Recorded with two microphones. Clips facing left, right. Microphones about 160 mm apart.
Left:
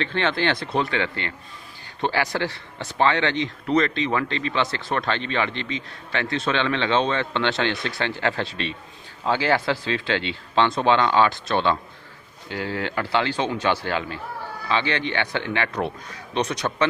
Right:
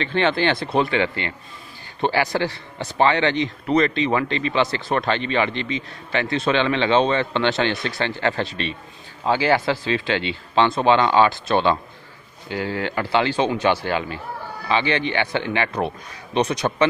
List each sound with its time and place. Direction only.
0.0 s speech: 10° right (ahead or behind)